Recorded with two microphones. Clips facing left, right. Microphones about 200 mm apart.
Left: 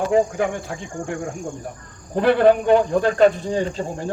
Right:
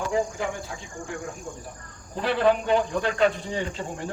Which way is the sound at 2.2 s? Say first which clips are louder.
Left 7 dB; 55° left (ahead or behind).